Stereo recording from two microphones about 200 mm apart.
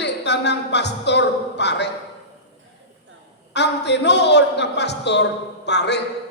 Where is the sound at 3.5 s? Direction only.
60° left (ahead or behind).